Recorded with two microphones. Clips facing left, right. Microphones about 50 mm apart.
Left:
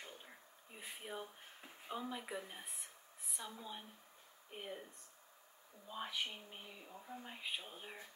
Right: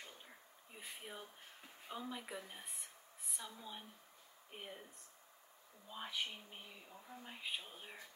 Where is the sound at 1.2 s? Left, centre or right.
Centre.